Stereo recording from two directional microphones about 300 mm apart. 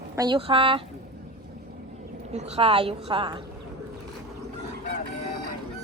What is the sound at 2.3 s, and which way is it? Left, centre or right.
A woman's voice, right.